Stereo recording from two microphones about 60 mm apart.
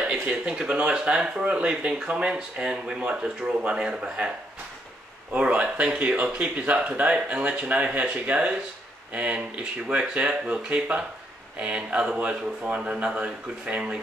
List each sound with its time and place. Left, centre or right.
0.0 s speech: centre
5.3 s speech: centre